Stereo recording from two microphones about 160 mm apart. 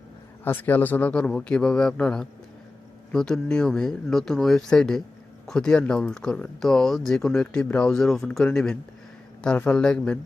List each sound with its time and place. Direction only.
0.4 s a man's voice: 10° left (ahead or behind)